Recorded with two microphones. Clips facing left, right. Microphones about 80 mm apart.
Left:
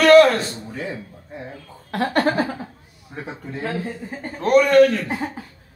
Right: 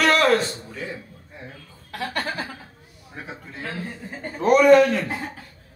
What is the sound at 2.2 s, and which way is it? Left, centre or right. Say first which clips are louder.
Speech: left 11 dB; left.